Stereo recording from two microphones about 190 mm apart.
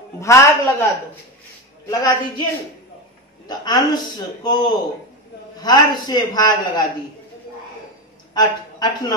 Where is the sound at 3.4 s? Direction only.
20° left (ahead or behind).